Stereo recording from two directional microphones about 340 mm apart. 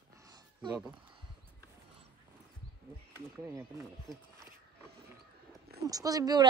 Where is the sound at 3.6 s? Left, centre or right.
Centre.